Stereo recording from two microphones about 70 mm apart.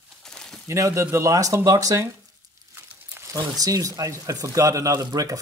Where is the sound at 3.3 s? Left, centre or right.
Right.